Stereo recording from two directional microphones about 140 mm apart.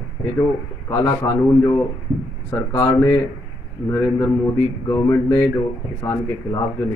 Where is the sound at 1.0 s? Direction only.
15° left (ahead or behind).